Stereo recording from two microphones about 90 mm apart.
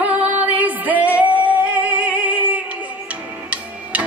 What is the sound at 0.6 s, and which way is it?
Music, 15° right (ahead or behind).